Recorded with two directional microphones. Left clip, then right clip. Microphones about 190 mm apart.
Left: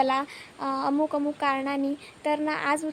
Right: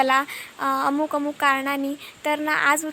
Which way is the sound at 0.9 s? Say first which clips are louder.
Right 2 dB; 15° right (ahead or behind).